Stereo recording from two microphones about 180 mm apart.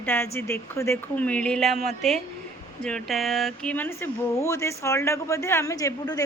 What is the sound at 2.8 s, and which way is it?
Speech, centre (ahead or behind).